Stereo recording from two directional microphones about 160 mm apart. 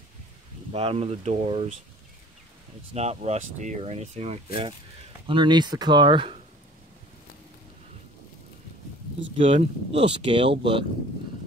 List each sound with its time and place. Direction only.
0.7 s speech: 35° right (ahead or behind)
2.9 s speech: 40° right (ahead or behind)
5.2 s speech: 30° right (ahead or behind)
9.4 s speech: 35° right (ahead or behind)